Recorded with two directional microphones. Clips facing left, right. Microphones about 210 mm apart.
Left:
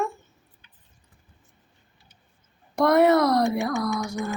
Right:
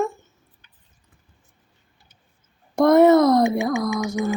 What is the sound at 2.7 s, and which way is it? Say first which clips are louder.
Speech: right 5 dB; 50° right (ahead or behind).